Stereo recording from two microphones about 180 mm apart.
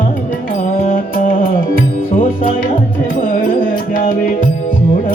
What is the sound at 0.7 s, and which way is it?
Music, 50° left (ahead or behind).